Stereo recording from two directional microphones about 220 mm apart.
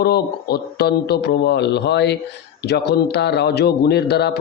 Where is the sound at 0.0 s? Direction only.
45° left (ahead or behind).